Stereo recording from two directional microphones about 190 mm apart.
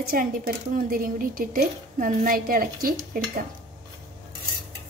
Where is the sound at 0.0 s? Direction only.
50° right (ahead or behind).